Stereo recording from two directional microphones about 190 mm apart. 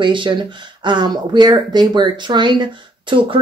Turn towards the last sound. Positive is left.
turn(degrees=-25)  # may be behind; listen again after turning